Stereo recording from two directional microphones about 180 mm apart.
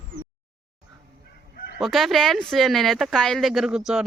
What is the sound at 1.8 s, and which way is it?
Speech, centre (ahead or behind).